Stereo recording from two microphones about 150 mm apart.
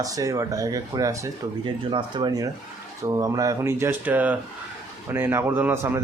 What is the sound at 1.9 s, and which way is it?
A man's voice, 35° right (ahead or behind).